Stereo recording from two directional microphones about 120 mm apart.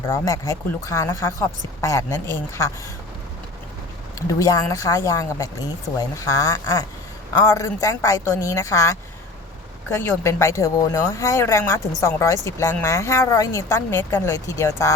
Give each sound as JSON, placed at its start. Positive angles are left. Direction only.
{"t": 0.1, "sound": "speech", "side_deg": 25}
{"t": 4.3, "sound": "speech", "side_deg": 30}